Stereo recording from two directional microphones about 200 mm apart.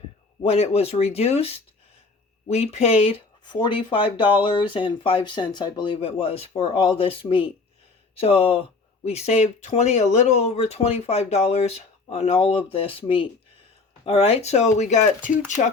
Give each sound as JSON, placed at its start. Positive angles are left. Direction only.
{"t": 0.4, "sound": "speech", "side_deg": 30}